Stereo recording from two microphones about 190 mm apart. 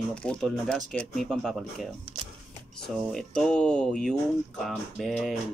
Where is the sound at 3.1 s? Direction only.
Centre (ahead or behind).